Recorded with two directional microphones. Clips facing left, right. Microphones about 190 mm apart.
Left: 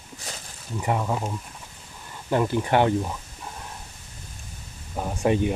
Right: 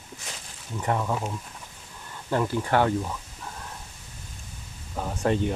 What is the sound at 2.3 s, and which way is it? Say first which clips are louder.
Speech: left 2 dB; 15° left (ahead or behind).